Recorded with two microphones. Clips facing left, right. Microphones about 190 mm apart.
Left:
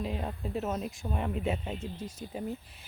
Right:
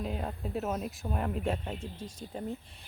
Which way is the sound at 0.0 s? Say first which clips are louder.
Left 1 dB; centre (ahead or behind).